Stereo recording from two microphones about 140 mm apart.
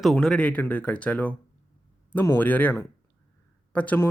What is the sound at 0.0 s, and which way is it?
Speech, 5° left (ahead or behind).